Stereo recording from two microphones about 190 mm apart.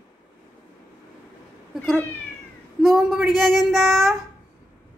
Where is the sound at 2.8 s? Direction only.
Centre (ahead or behind).